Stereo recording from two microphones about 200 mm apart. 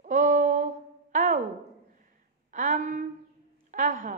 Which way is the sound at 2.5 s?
40° right (ahead or behind).